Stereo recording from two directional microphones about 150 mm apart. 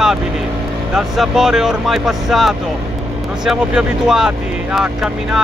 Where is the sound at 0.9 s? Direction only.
Centre (ahead or behind).